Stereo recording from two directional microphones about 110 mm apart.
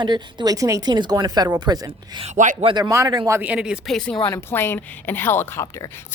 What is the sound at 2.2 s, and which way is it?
Speech, 55° right (ahead or behind).